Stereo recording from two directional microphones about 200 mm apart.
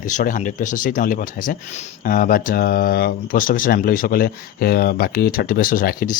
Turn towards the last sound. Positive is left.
turn(degrees=45)  # may be behind; listen again after turning